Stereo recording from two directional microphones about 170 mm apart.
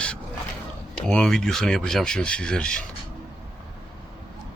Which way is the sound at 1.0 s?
5° left (ahead or behind).